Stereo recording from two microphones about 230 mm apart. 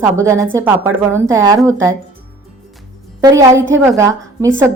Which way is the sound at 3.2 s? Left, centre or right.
Centre.